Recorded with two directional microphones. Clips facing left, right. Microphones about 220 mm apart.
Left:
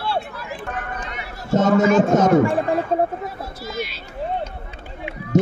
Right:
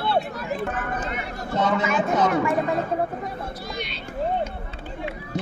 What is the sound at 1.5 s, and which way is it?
Speech, 45° left (ahead or behind).